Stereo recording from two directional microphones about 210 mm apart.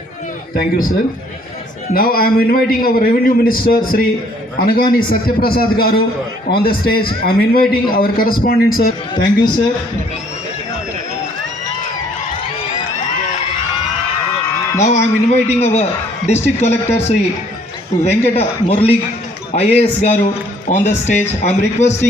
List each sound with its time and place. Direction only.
0.5 s a man's voice: 40° left (ahead or behind)
14.8 s a man's voice: 35° left (ahead or behind)